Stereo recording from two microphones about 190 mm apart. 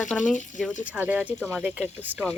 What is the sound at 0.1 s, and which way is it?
Speech, 5° left (ahead or behind).